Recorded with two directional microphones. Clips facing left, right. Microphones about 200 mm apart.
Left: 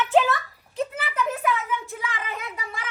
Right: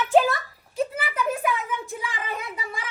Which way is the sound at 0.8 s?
10° right (ahead or behind).